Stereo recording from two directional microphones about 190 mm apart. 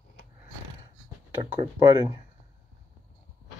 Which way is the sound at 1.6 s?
20° right (ahead or behind).